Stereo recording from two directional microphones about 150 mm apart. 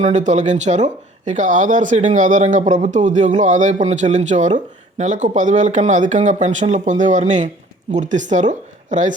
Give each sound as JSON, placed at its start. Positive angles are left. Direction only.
{"t": 0.0, "sound": "speech", "side_deg": -55}